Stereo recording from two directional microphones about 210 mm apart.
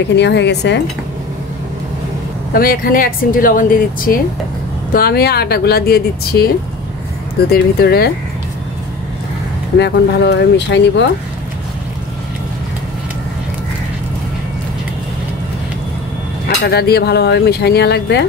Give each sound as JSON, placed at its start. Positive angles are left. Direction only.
{"t": 0.0, "sound": "speech", "side_deg": 55}
{"t": 2.5, "sound": "speech", "side_deg": 45}
{"t": 7.5, "sound": "speech", "side_deg": 50}
{"t": 9.8, "sound": "speech", "side_deg": 55}
{"t": 16.4, "sound": "speech", "side_deg": 50}